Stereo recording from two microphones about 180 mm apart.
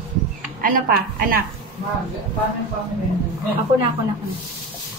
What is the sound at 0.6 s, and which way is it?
Speech, 50° right (ahead or behind).